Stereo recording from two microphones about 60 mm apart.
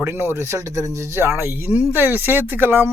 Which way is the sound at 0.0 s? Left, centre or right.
Right.